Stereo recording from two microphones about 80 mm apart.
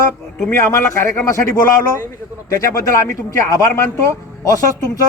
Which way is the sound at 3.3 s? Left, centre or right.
Left.